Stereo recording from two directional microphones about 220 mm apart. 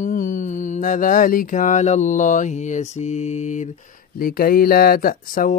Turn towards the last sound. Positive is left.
turn(degrees=40)  # may be behind; listen again after turning